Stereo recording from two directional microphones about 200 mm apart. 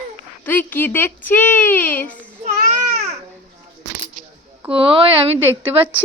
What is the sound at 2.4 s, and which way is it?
Baby cry, 35° right (ahead or behind).